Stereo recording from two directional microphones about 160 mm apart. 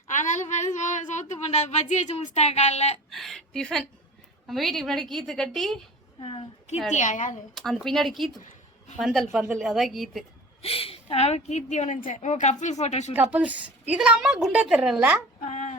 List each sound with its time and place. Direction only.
0.1 s speech: 50° left (ahead or behind)
3.1 s a woman's voice: centre (ahead or behind)
6.1 s a woman's voice: 35° left (ahead or behind)
6.9 s a woman's voice: 50° left (ahead or behind)
7.5 s a woman's voice: centre (ahead or behind)
10.6 s a woman's voice: 35° left (ahead or behind)
13.1 s a woman's voice: 10° right (ahead or behind)
15.4 s a sound: 50° left (ahead or behind)